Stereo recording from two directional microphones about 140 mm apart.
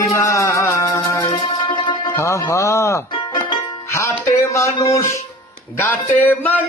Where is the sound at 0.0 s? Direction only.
20° left (ahead or behind).